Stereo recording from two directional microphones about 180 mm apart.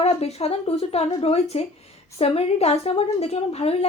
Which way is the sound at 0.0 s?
35° left (ahead or behind).